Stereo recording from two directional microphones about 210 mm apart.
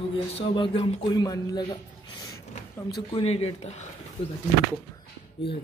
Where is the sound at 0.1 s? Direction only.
25° left (ahead or behind).